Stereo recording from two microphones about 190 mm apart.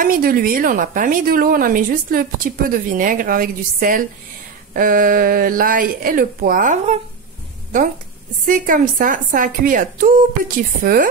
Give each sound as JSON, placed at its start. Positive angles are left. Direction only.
{"t": 0.0, "sound": "a woman's voice", "side_deg": -50}
{"t": 8.5, "sound": "a woman's voice", "side_deg": -45}